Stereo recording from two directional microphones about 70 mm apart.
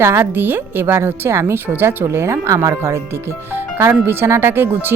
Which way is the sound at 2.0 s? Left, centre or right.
Right.